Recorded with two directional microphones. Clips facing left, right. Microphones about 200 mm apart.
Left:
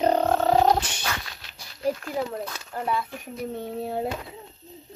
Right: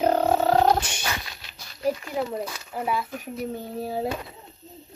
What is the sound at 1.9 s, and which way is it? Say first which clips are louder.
Speech: right 1 dB; centre (ahead or behind).